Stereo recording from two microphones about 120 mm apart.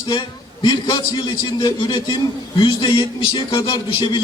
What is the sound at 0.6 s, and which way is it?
A man's voice, 35° left (ahead or behind).